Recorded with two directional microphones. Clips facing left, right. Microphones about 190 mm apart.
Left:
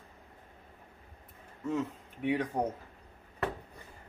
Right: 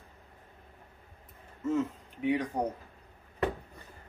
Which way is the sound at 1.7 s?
Centre (ahead or behind).